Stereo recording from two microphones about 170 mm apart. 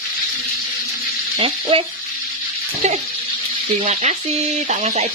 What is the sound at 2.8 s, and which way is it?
Speech, 45° right (ahead or behind).